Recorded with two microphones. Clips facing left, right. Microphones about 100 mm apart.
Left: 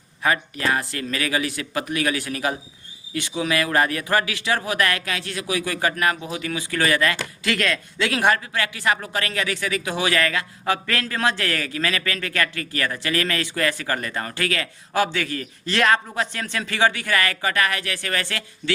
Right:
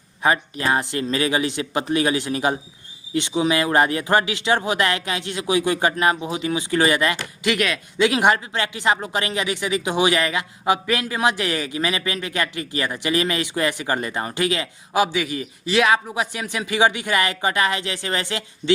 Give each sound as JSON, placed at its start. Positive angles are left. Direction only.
{"t": 0.2, "sound": "a man's voice", "side_deg": -25}